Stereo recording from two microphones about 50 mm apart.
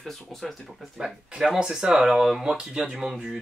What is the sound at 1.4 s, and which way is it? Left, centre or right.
Speech, centre.